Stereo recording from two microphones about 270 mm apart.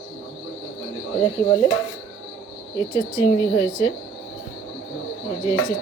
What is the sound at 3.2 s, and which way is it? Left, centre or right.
Speech, centre.